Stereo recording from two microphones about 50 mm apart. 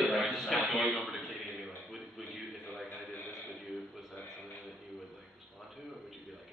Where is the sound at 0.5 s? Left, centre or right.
Centre.